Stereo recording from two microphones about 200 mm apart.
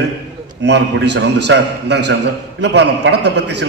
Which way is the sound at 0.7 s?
60° right (ahead or behind).